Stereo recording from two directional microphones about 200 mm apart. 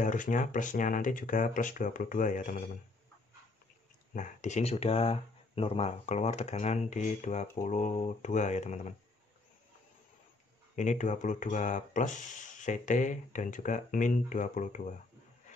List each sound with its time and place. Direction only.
0.0 s speech: 40° left (ahead or behind)
4.1 s speech: 40° left (ahead or behind)
10.8 s speech: 40° left (ahead or behind)